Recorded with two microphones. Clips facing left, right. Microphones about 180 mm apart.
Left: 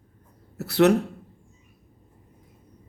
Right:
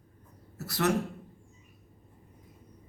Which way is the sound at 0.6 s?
65° left (ahead or behind).